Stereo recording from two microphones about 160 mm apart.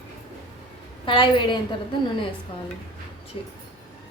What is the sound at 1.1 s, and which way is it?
Speech, 30° left (ahead or behind).